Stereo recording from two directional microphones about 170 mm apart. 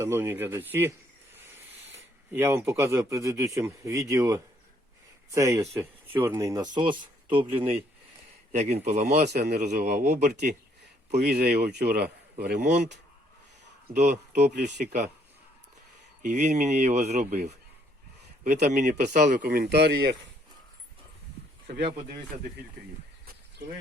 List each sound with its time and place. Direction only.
0.0 s speech: 15° right (ahead or behind); by 10.3 s 45° right (ahead or behind)
11.1 s speech: 75° right (ahead or behind)
13.9 s speech: 45° right (ahead or behind)
16.2 s speech: 45° right (ahead or behind); by 20.1 s 75° right (ahead or behind)